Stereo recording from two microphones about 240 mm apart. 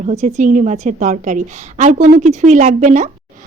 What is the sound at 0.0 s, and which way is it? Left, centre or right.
Speech, right.